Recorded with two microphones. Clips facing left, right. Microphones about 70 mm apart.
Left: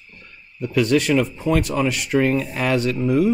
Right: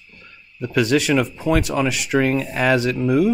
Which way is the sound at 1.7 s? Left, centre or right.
Right.